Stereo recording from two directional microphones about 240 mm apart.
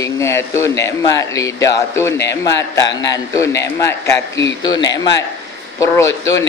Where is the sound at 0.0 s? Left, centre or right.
Centre.